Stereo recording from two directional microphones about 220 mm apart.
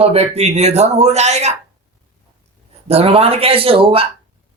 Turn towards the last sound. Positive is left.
turn(degrees=-25)  # may be behind; listen again after turning